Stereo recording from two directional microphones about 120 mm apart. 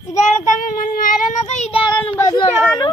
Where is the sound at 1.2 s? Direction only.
85° left.